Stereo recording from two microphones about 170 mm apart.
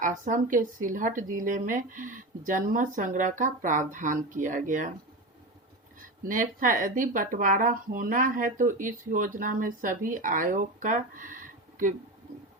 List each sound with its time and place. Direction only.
0.0 s speech: 50° right (ahead or behind)
6.2 s speech: 50° right (ahead or behind)